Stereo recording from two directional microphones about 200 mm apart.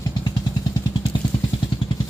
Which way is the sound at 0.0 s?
20° left (ahead or behind).